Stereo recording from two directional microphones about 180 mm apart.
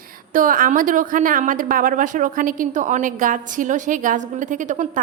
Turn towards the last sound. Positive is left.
turn(degrees=-45)  # may be behind; listen again after turning